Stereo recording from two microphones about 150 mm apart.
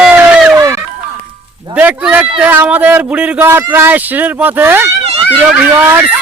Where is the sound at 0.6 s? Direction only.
20° right (ahead or behind).